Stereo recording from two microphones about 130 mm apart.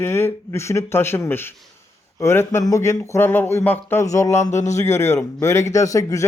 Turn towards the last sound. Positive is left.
turn(degrees=25)  # may be behind; listen again after turning